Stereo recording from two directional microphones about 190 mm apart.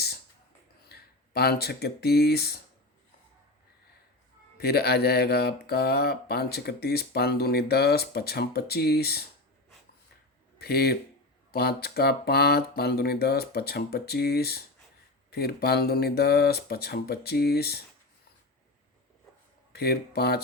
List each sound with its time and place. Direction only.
0.9 s speech: 55° left (ahead or behind)
4.5 s speech: 55° left (ahead or behind)
10.6 s speech: 55° left (ahead or behind)
19.7 s speech: 55° left (ahead or behind)